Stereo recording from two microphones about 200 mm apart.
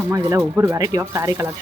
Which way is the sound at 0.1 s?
15° right (ahead or behind).